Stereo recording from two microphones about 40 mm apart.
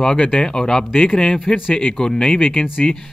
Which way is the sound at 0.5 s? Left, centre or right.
Centre.